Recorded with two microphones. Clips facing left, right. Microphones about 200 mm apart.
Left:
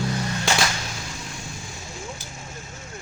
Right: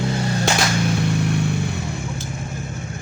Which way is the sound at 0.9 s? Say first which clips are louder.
Right 16 dB; 65° right (ahead or behind).